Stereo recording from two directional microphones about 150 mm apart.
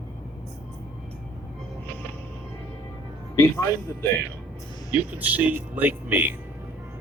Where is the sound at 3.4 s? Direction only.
15° left (ahead or behind).